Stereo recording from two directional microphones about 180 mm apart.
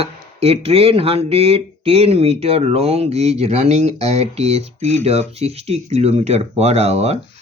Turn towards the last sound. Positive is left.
turn(degrees=-35)  # may be behind; listen again after turning